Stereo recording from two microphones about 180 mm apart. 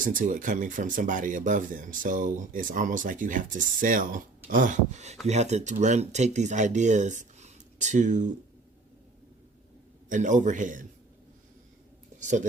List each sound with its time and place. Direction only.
0.0 s speech: 45° right (ahead or behind)
10.1 s speech: 45° right (ahead or behind)
12.2 s speech: 45° right (ahead or behind)